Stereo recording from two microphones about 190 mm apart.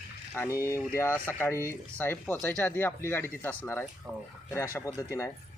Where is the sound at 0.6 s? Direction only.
15° left (ahead or behind).